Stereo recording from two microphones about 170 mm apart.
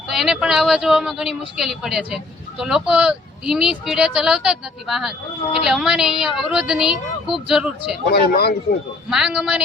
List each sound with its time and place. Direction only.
0.1 s speech: 5° right (ahead or behind)
8.1 s speech: 65° left (ahead or behind)
9.0 s speech: 5° right (ahead or behind)